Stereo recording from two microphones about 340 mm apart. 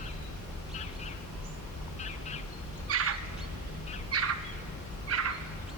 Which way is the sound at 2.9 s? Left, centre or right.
Right.